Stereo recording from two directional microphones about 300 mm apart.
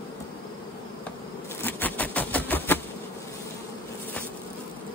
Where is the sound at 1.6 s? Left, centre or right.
Centre.